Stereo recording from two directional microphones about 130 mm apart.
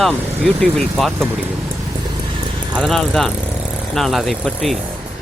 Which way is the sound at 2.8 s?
Centre (ahead or behind).